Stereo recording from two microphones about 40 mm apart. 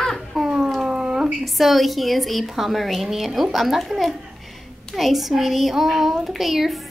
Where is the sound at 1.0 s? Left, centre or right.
Centre.